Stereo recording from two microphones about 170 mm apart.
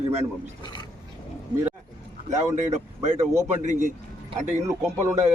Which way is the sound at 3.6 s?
45° right (ahead or behind).